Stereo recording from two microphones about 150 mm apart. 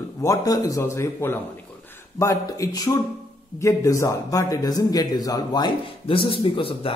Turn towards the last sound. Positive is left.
turn(degrees=35)  # may be behind; listen again after turning